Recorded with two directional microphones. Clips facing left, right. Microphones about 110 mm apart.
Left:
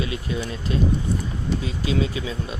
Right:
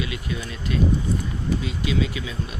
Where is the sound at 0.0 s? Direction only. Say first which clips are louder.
Left 3 dB; 30° left (ahead or behind).